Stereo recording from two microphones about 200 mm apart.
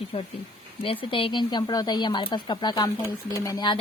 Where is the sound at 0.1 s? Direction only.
30° left (ahead or behind).